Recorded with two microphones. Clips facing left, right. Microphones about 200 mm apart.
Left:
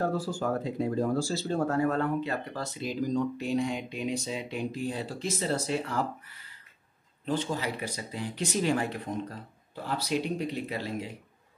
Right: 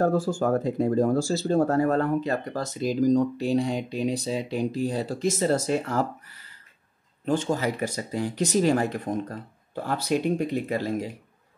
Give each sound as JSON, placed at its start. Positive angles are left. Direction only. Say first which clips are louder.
{"t": 0.0, "sound": "speech", "louder": "right 7 dB", "side_deg": -50}
{"t": 7.2, "sound": "speech", "louder": "right 6 dB", "side_deg": -45}